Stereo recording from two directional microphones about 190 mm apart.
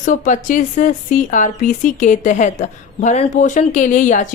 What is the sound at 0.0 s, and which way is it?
Speech, 40° left (ahead or behind).